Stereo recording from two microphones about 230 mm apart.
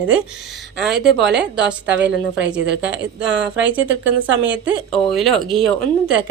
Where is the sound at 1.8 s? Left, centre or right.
Right.